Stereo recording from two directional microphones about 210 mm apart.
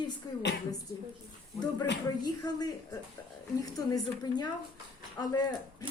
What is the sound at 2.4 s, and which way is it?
A woman's voice, 20° left (ahead or behind).